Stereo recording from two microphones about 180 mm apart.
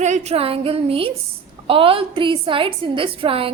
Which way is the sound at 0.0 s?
40° right (ahead or behind).